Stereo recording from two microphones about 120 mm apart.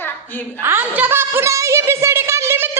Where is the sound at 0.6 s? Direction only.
20° right (ahead or behind).